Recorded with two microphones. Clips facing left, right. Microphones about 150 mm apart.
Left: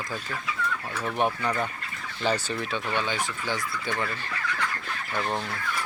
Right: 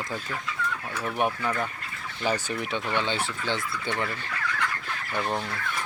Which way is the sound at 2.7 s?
20° right (ahead or behind).